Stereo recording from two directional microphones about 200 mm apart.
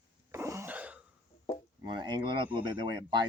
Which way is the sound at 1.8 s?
20° right (ahead or behind).